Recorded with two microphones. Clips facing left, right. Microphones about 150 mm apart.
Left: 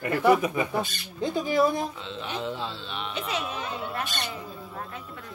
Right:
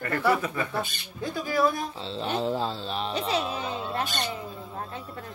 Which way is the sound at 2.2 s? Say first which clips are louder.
Right 5 dB; 45° right (ahead or behind).